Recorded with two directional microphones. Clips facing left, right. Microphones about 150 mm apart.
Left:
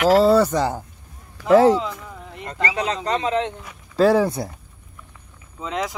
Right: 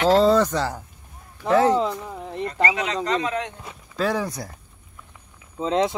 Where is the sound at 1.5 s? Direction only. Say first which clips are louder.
Left 4 dB; 30° left (ahead or behind).